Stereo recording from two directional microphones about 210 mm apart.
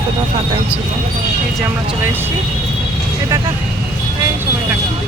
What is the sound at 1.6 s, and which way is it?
Speech, 10° right (ahead or behind).